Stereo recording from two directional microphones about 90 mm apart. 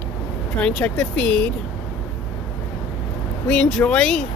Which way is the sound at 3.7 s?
10° left (ahead or behind).